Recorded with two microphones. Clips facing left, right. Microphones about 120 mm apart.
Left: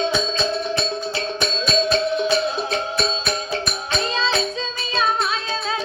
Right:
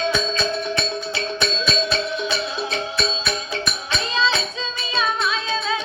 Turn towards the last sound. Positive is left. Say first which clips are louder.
# right 1 dB
turn(degrees=40)  # may be behind; listen again after turning